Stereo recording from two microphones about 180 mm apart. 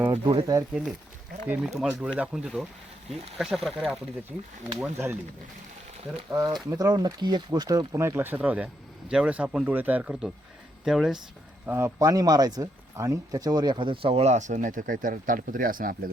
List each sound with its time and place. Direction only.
0.3 s speech: 20° right (ahead or behind)
0.7 s speech: centre (ahead or behind)
4.8 s speech: 15° right (ahead or behind)
6.3 s speech: 20° right (ahead or behind); by 11.2 s centre (ahead or behind)
11.6 s speech: 10° right (ahead or behind); by 16.0 s 50° right (ahead or behind)